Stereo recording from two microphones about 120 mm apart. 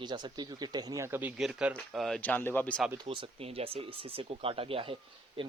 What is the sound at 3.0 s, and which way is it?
Speech, 55° right (ahead or behind).